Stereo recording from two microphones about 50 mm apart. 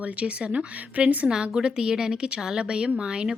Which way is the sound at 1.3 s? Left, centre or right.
Centre.